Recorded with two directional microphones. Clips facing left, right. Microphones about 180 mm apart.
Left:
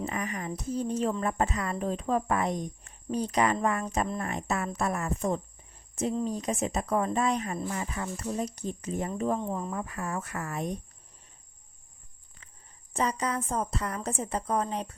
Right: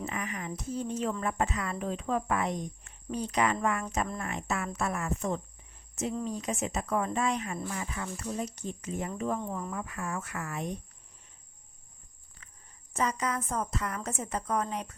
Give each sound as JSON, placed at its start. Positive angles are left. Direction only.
{"t": 0.0, "sound": "speech", "side_deg": 35}
{"t": 9.4, "sound": "speech", "side_deg": 20}
{"t": 9.7, "sound": "speech", "side_deg": 35}
{"t": 12.4, "sound": "cricket", "side_deg": 30}
{"t": 12.9, "sound": "speech", "side_deg": 30}